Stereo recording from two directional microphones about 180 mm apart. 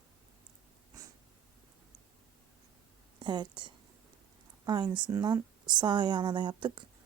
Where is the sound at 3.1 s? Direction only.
25° right (ahead or behind).